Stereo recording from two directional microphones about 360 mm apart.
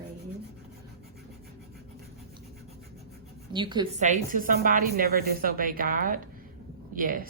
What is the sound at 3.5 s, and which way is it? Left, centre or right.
A woman's voice, centre.